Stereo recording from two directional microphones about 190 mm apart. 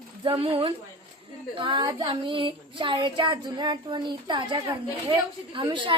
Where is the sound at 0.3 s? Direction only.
30° right (ahead or behind).